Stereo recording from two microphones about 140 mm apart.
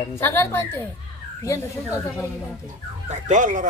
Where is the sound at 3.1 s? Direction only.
65° right (ahead or behind).